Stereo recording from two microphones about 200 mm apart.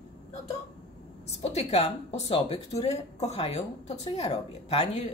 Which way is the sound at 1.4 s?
30° left (ahead or behind).